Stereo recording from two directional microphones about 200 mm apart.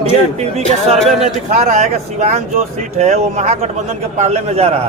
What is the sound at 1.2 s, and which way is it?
Speech, 40° right (ahead or behind).